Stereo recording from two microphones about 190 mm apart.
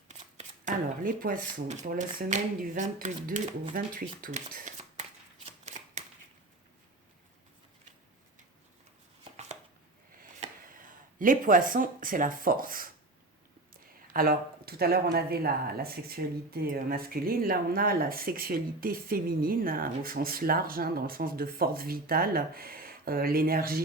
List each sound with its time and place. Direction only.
0.1 s speech: 40° right (ahead or behind)
5.5 s shuffling cards: 35° right (ahead or behind)
10.4 s speech: 45° right (ahead or behind)
14.1 s speech: 50° right (ahead or behind)